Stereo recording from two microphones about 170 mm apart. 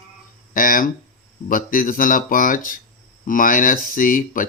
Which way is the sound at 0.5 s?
55° left (ahead or behind).